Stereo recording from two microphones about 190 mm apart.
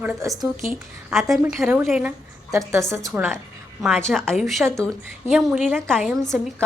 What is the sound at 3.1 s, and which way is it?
A woman's voice, centre (ahead or behind).